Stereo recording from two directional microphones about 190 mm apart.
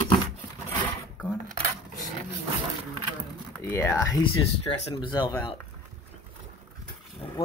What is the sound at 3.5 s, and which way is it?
Speech, 10° left (ahead or behind).